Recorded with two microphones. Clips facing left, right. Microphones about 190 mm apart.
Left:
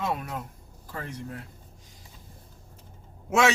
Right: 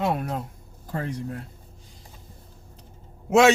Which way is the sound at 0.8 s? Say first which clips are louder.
Right 7 dB; 50° right (ahead or behind).